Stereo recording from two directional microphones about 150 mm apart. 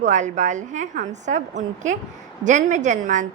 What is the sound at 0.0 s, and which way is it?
A woman's voice, 55° right (ahead or behind).